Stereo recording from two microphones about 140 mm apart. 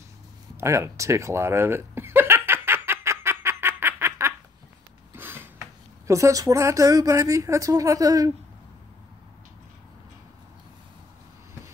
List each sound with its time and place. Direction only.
0.6 s chuckle: 20° right (ahead or behind)
5.1 s speech: 15° right (ahead or behind)